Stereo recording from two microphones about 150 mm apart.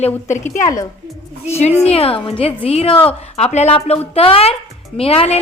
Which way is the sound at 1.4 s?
45° left (ahead or behind).